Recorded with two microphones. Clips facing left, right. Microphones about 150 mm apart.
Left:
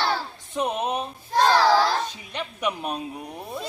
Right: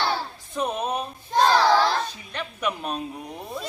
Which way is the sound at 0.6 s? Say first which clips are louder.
Left 1 dB; 20° left (ahead or behind).